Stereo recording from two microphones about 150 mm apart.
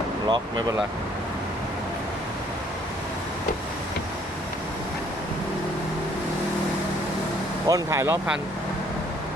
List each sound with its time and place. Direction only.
0.3 s speech: 30° right (ahead or behind)
7.7 s speech: 20° right (ahead or behind)